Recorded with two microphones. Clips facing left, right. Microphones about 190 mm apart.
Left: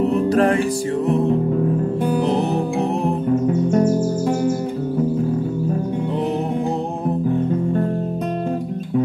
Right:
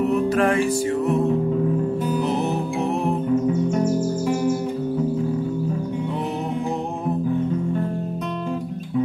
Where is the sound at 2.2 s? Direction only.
35° left (ahead or behind).